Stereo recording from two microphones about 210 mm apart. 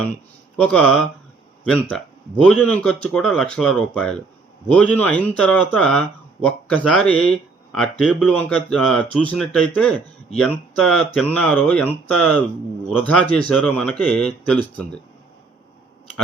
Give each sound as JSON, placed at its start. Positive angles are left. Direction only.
{"t": 0.5, "sound": "speech", "side_deg": 5}